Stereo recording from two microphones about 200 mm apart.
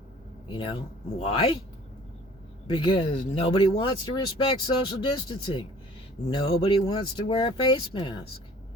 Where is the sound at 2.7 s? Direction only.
25° left (ahead or behind).